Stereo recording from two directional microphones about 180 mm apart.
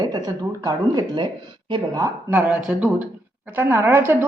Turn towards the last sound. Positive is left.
turn(degrees=-10)  # may be behind; listen again after turning